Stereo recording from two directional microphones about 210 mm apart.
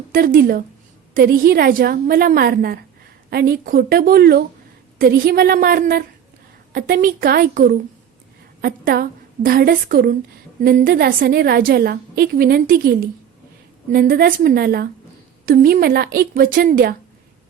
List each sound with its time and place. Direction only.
0.1 s a woman's voice: 45° right (ahead or behind)